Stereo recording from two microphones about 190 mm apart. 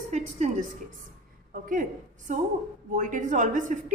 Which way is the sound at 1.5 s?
45° right (ahead or behind).